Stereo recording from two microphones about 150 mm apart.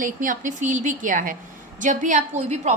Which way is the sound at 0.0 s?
60° right (ahead or behind).